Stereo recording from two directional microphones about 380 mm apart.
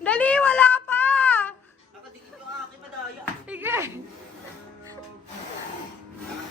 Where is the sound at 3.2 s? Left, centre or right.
Centre.